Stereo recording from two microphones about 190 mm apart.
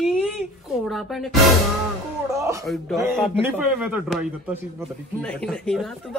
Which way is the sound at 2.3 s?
15° right (ahead or behind).